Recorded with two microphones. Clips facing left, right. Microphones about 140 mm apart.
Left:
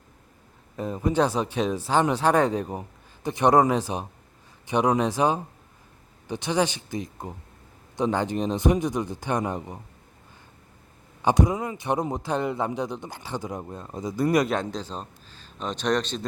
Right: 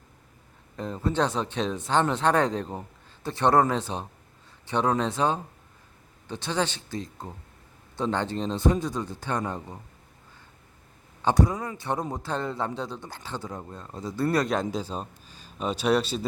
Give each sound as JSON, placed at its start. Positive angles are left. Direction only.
{"t": 0.8, "sound": "a man's voice", "side_deg": 10}
{"t": 11.2, "sound": "a man's voice", "side_deg": 15}
{"t": 14.5, "sound": "speech", "side_deg": -5}